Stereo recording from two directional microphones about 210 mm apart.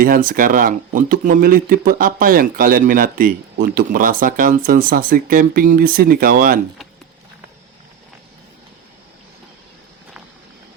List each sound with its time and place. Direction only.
0.0 s speech: 40° right (ahead or behind)